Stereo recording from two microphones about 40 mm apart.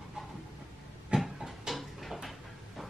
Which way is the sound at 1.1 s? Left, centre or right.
Centre.